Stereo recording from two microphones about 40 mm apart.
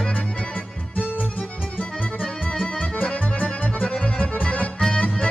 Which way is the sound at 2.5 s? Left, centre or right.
Left.